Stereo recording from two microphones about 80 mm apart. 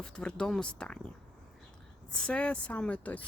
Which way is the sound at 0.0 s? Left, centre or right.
Centre.